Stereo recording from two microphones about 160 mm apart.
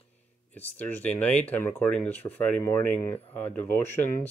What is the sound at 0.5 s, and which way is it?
Speech, 10° left (ahead or behind).